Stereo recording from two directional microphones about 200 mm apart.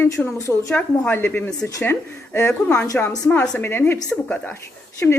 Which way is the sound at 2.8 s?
15° left (ahead or behind).